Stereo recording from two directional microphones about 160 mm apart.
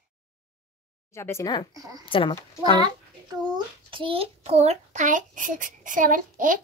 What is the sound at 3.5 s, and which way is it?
A child's voice, 30° right (ahead or behind).